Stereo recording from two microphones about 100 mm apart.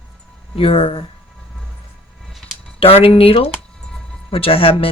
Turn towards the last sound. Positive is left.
turn(degrees=70)  # may be behind; listen again after turning